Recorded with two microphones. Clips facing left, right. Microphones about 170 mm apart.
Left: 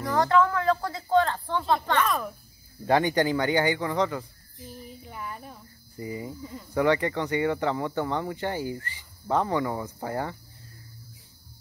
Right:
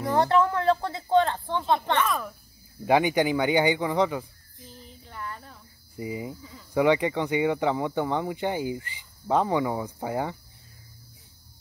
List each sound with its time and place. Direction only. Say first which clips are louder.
0.0 s speech: even; 25° right (ahead or behind)
2.0 s speech: left 1 dB; centre (ahead or behind)
2.8 s speech: right 1 dB; 10° right (ahead or behind)
4.7 s a sound: left 1 dB; 10° left (ahead or behind)
5.9 s speech: right 1 dB; 15° right (ahead or behind)